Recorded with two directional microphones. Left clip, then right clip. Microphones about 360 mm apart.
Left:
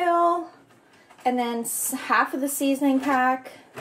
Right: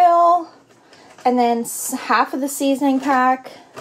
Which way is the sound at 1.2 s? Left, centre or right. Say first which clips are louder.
Right 8 dB; right.